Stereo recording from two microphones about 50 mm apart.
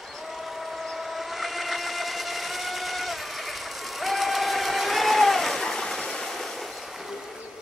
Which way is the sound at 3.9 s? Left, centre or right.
Centre.